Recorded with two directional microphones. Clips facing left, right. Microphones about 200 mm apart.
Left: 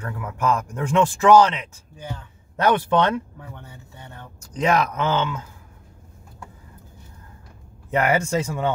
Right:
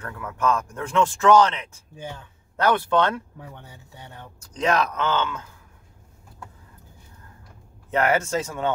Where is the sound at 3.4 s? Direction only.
15° right (ahead or behind).